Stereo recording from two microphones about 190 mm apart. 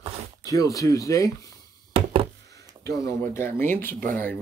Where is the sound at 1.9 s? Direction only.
30° right (ahead or behind).